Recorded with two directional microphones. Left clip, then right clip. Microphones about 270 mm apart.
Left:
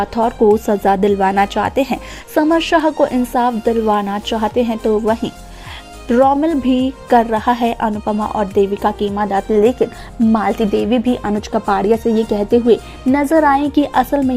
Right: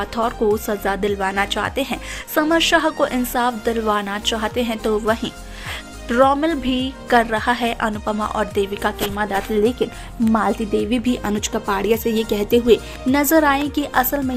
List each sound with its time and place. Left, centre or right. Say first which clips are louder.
0.0 s a woman's voice: left 6 dB; left
10.3 s speech: left 3 dB; centre